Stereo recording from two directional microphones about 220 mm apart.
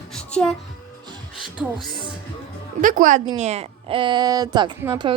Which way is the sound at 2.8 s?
35° right (ahead or behind).